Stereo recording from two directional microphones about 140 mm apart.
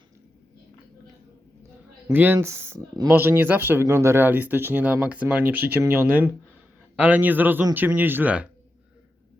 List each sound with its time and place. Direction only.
2.0 s speech: 15° right (ahead or behind)